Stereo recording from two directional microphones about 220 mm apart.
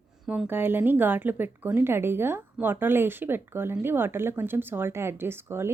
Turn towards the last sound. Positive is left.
turn(degrees=-10)  # may be behind; listen again after turning